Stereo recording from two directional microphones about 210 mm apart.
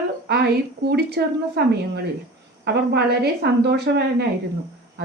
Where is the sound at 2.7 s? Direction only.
50° right (ahead or behind).